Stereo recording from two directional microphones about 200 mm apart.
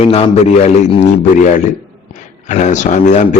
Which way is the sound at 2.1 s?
35° left (ahead or behind).